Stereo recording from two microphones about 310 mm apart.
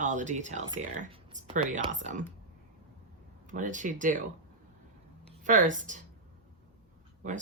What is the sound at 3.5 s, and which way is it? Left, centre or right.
Speech, right.